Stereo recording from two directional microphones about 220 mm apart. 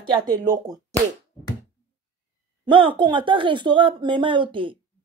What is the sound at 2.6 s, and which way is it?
Speech, 20° right (ahead or behind).